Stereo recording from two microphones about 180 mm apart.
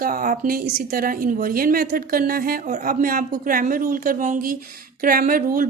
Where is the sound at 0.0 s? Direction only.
55° right (ahead or behind).